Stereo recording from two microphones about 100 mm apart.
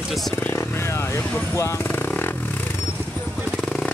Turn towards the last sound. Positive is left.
turn(degrees=10)  # may be behind; listen again after turning